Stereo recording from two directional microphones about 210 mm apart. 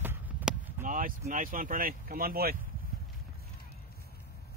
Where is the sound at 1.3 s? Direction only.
40° right (ahead or behind).